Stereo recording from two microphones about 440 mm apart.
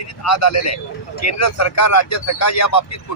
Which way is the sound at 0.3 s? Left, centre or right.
Left.